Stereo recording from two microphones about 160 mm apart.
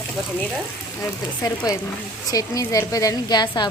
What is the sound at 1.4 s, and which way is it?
A woman's voice, 20° left (ahead or behind).